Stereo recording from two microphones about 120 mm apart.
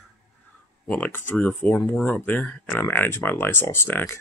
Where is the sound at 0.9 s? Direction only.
15° left (ahead or behind).